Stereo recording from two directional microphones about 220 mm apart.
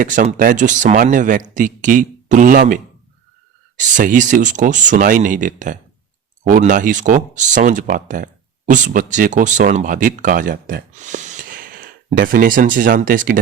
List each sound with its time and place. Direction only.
0.0 s speech: 35° right (ahead or behind)
3.8 s speech: 35° right (ahead or behind)